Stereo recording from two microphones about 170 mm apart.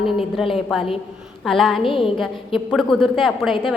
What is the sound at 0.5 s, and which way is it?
A woman's voice, centre (ahead or behind).